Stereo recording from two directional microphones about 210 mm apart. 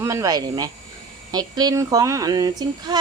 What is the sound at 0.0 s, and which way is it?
Speech, 15° right (ahead or behind).